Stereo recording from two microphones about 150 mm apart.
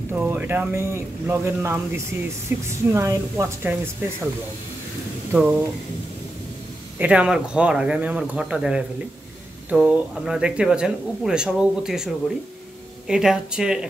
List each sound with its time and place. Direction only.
0.1 s a woman's voice: 15° right (ahead or behind)
5.3 s speech: 10° right (ahead or behind)
7.0 s speech: 10° right (ahead or behind)